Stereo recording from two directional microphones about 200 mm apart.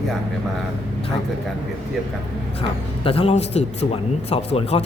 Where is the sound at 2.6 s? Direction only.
30° left (ahead or behind).